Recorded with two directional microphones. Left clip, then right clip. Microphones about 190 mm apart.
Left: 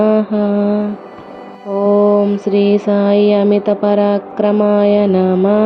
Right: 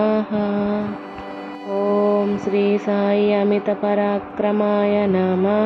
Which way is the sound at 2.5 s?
20° left (ahead or behind).